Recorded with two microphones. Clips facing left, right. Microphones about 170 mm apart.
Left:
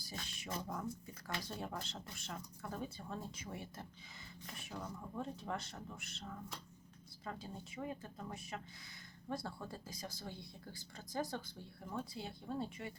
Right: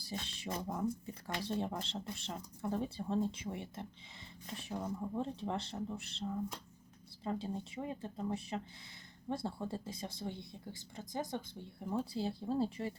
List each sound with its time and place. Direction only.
0.0 s speech: 30° right (ahead or behind)